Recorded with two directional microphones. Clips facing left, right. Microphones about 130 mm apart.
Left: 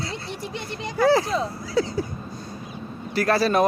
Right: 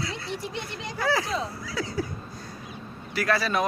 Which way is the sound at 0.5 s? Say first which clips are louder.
Left 5 dB; 60° left (ahead or behind).